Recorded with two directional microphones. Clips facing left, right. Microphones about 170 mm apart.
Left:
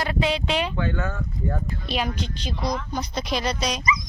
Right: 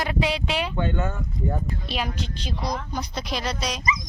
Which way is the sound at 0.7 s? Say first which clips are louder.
Even; 25° right (ahead or behind).